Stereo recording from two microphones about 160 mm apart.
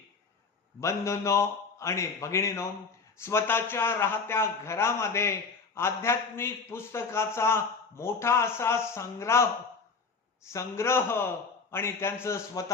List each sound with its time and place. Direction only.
0.8 s a man's voice: 20° left (ahead or behind)